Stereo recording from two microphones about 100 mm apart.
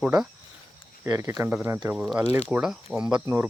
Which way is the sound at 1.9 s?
5° right (ahead or behind).